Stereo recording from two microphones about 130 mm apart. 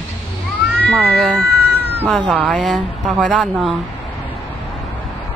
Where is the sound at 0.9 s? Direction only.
5° left (ahead or behind).